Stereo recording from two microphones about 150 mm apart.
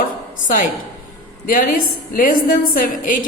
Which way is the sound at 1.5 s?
65° left (ahead or behind).